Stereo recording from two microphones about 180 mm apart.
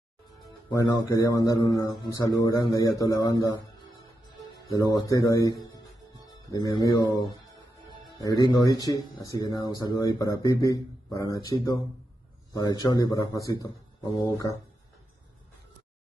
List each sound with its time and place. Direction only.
0.7 s speech: 20° left (ahead or behind)
4.9 s speech: 20° left (ahead or behind)
6.8 s speech: 20° left (ahead or behind)